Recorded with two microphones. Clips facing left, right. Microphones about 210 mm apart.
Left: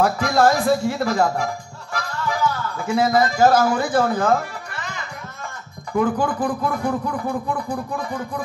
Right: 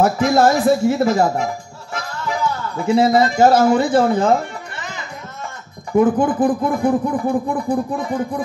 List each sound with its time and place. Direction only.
0.0 s speech: 25° right (ahead or behind)
2.0 s music: 25° right (ahead or behind)
2.9 s speech: 25° right (ahead or behind)
7.1 s speech: 35° right (ahead or behind)
8.0 s speech: 20° right (ahead or behind)